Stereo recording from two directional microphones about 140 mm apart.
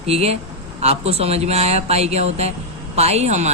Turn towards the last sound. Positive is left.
turn(degrees=-55)  # may be behind; listen again after turning